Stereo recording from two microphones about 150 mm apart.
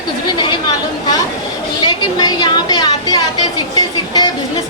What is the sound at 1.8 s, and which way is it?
A woman's voice, 30° left (ahead or behind).